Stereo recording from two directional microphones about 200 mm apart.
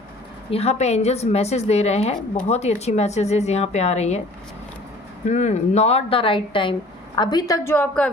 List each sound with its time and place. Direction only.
0.5 s a woman's voice: 30° left (ahead or behind)
5.2 s a woman's voice: 35° left (ahead or behind); by 8.1 s 10° left (ahead or behind)